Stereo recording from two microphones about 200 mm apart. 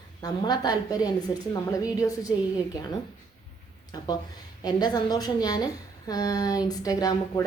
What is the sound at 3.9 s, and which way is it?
A woman's voice, 20° left (ahead or behind).